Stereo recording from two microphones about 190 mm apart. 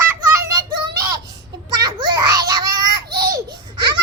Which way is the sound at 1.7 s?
20° right (ahead or behind).